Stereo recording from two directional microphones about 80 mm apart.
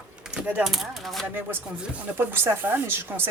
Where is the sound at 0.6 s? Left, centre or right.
Centre.